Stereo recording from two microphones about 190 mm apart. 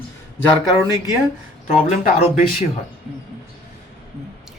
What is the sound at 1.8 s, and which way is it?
Speech, 35° left (ahead or behind).